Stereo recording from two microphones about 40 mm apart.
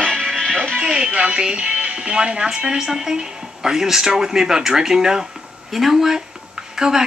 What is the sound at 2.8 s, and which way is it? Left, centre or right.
Dishes, centre.